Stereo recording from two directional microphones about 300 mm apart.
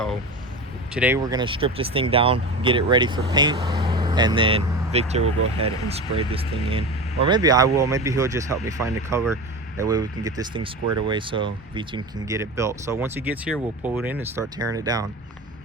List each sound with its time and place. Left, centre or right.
0.9 s speech: centre